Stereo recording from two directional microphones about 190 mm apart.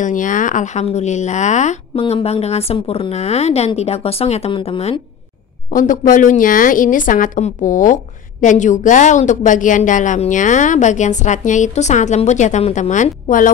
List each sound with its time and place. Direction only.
0.0 s a woman's voice: 45° left (ahead or behind)
5.7 s a woman's voice: 45° left (ahead or behind)